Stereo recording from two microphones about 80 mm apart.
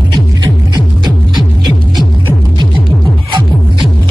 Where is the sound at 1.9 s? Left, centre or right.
Right.